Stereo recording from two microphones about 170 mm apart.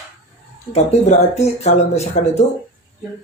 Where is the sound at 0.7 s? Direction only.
40° left (ahead or behind).